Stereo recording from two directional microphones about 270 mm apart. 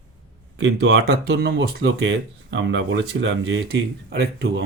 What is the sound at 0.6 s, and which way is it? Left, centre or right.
Speech, right.